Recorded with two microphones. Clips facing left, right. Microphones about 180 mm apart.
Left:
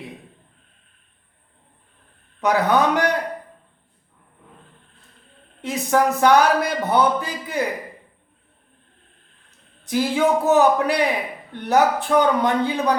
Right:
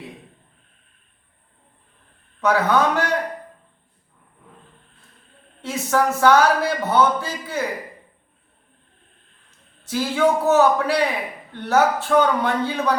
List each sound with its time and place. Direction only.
2.4 s speech: 15° left (ahead or behind)
5.6 s speech: 15° left (ahead or behind)
9.9 s speech: 15° left (ahead or behind)